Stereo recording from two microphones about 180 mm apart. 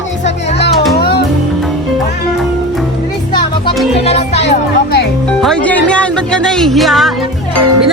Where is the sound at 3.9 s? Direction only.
35° left (ahead or behind).